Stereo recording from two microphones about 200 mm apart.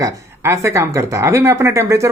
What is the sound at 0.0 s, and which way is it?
Speech, 15° right (ahead or behind).